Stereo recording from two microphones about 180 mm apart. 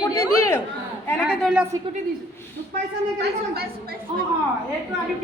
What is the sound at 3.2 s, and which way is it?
Speech, 60° right (ahead or behind).